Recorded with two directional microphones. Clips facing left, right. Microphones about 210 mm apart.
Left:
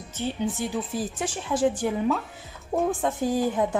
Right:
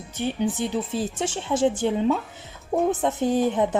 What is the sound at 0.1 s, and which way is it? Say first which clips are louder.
Speech: right 3 dB; 15° right (ahead or behind).